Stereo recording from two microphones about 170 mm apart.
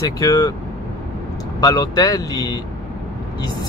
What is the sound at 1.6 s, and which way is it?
Speech, 25° left (ahead or behind).